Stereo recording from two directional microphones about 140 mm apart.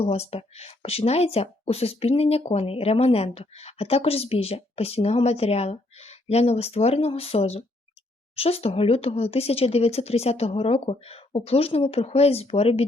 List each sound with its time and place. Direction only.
0.0 s speech: 45° left (ahead or behind)